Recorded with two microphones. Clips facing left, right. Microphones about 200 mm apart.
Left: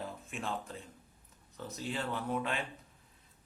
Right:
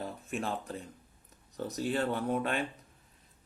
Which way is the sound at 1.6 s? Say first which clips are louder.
Right 7 dB; 40° right (ahead or behind).